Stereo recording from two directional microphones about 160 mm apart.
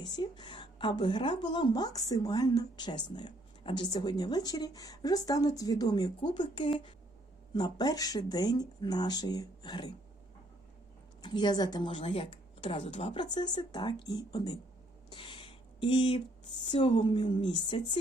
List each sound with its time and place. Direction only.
0.0 s a woman's voice: 30° left (ahead or behind)
11.2 s a woman's voice: 30° left (ahead or behind)
15.1 s a sound: 30° left (ahead or behind)
16.7 s a woman's voice: 35° left (ahead or behind)